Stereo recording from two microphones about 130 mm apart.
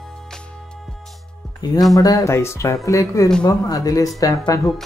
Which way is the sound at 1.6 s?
35° left (ahead or behind).